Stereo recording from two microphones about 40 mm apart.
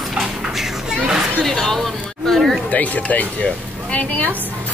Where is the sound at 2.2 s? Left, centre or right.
Centre.